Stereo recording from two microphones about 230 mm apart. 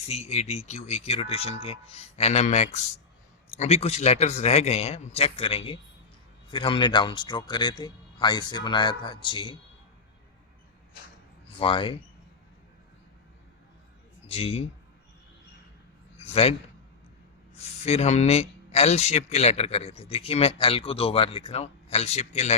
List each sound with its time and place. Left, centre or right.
0.1 s speech: left
11.6 s speech: left
14.3 s speech: left
16.1 s a man's voice: left
17.6 s speech: left